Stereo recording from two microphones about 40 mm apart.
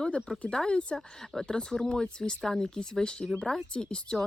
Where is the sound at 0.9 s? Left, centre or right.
Centre.